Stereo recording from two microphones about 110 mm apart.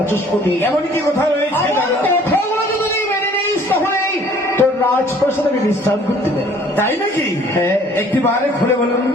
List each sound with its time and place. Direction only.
4.5 s music: 20° left (ahead or behind)
7.5 s speech: 25° left (ahead or behind)